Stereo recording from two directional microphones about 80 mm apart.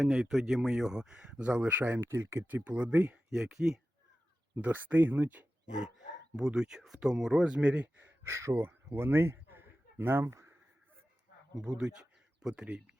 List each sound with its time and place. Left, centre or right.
0.0 s speech: centre; by 2.6 s right
2.6 s speech: centre
3.2 s speech: centre
4.6 s speech: right
6.3 s speech: centre
8.3 s speech: right
8.5 s a sound: right
11.8 s a sound: centre
12.6 s speech: centre